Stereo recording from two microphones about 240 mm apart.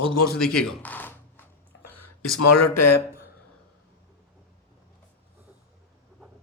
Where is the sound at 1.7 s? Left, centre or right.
Left.